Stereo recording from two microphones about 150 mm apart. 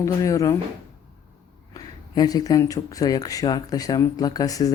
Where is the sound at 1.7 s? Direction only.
25° left (ahead or behind).